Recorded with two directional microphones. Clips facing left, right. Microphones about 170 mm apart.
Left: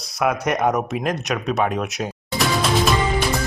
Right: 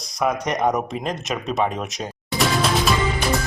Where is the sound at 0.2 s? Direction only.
5° left (ahead or behind).